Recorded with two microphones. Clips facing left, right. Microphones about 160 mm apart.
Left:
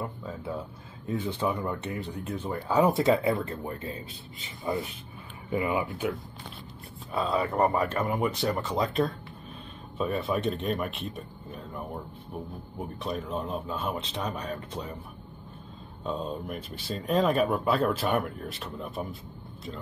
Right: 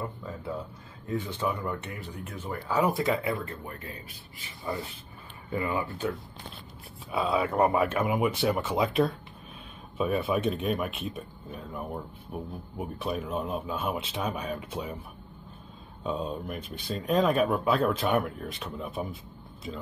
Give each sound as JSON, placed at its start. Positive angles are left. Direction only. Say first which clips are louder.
{"t": 1.2, "sound": "speech", "louder": "left 5 dB", "side_deg": 15}
{"t": 7.1, "sound": "a man's voice", "louder": "right 1 dB", "side_deg": -5}
{"t": 16.0, "sound": "speech", "louder": "right 1 dB", "side_deg": -5}